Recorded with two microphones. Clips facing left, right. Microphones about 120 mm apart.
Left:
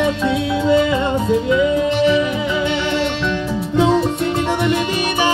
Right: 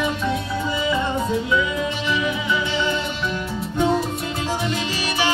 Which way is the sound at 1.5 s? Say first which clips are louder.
Left 7 dB; 55° left (ahead or behind).